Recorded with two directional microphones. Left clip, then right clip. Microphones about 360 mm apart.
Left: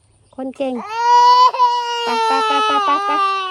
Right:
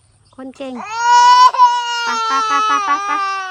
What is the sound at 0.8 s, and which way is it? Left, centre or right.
Baby cry, right.